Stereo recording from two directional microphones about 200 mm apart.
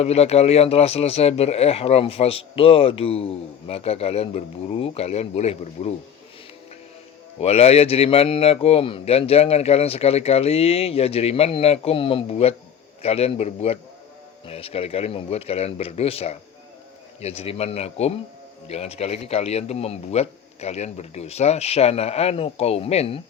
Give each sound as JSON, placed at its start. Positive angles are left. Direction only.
{"t": 0.0, "sound": "speech", "side_deg": 30}
{"t": 7.3, "sound": "speech", "side_deg": 30}